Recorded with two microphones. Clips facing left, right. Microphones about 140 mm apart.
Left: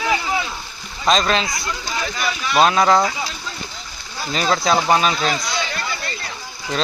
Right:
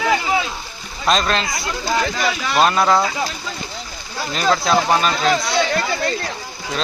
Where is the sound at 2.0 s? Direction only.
75° right (ahead or behind).